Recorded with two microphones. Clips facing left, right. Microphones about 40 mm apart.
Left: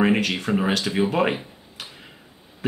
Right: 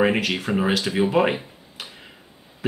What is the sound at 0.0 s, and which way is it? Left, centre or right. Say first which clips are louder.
Speech: even; centre.